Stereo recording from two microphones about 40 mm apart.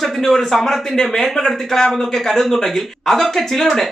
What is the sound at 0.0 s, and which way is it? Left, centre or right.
Speech, centre.